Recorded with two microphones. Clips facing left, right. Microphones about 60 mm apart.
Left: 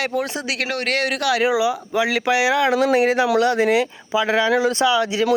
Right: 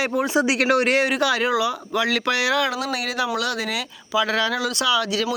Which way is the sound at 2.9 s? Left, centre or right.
Left.